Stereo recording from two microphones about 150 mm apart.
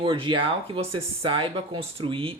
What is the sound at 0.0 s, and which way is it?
A man's voice, 35° right (ahead or behind).